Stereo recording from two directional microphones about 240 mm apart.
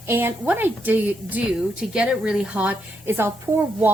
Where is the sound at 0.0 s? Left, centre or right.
Centre.